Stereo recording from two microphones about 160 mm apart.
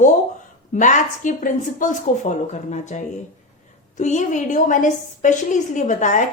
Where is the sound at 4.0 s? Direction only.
50° left (ahead or behind).